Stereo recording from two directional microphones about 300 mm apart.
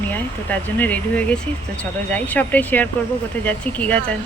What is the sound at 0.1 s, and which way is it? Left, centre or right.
Speech, centre.